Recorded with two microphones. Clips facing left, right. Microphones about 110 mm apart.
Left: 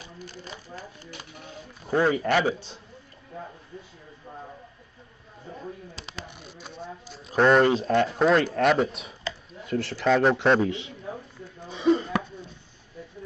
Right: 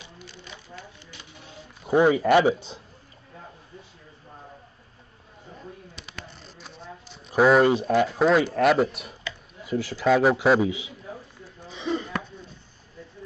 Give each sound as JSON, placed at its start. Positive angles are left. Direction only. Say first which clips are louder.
{"t": 0.0, "sound": "sewing machine", "louder": "left 4 dB", "side_deg": 45}
{"t": 1.9, "sound": "speech", "louder": "right 4 dB", "side_deg": -15}
{"t": 6.6, "sound": "a man's voice", "louder": "left 4 dB", "side_deg": 0}